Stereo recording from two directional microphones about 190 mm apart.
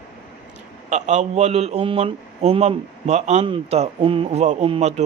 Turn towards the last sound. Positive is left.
turn(degrees=-30)  # may be behind; listen again after turning